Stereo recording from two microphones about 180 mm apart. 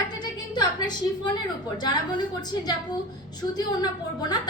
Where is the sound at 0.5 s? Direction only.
25° left (ahead or behind).